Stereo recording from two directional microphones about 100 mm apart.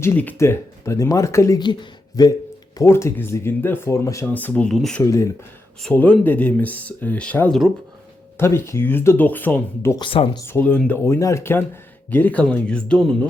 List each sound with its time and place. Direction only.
0.0 s speech: 20° left (ahead or behind)
1.5 s speech: 45° left (ahead or behind)
2.7 s speech: 30° left (ahead or behind)
4.3 s speech: 15° left (ahead or behind)
4.7 s speech: centre (ahead or behind)
5.9 s speech: 15° left (ahead or behind)
8.4 s speech: 25° left (ahead or behind)
10.0 s speech: 60° left (ahead or behind)
10.4 s speech: 25° left (ahead or behind)
10.7 s speech: 15° left (ahead or behind)
11.0 s speech: 30° left (ahead or behind); by 13.1 s 10° left (ahead or behind)